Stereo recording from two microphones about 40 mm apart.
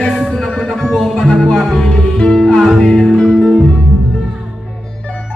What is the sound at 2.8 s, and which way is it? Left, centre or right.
Music, centre.